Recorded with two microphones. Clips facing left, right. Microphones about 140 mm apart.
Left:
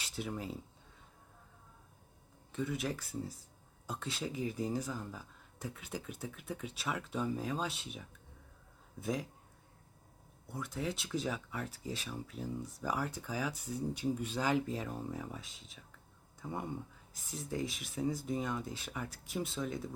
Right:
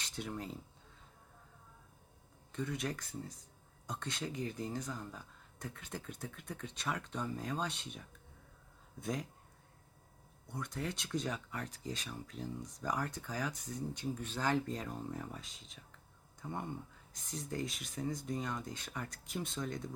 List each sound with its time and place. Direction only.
0.0 s speech: 5° left (ahead or behind)
2.5 s speech: 5° left (ahead or behind)
10.5 s speech: 5° left (ahead or behind)